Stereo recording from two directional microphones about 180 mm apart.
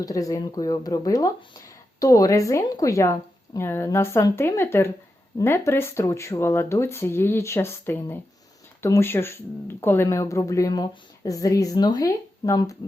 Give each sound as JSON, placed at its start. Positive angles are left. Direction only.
{"t": 0.0, "sound": "speech", "side_deg": 20}